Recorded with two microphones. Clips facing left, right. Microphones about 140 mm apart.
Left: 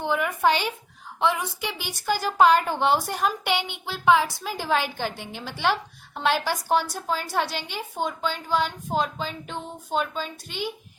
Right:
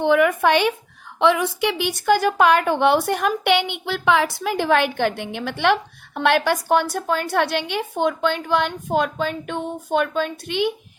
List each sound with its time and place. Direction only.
0.0 s speech: 70° right (ahead or behind)
1.2 s speech: 75° right (ahead or behind)